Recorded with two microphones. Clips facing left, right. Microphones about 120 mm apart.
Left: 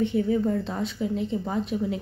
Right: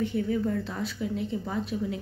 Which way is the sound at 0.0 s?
25° left (ahead or behind).